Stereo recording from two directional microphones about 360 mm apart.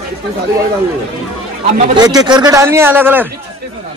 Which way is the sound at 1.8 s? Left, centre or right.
Centre.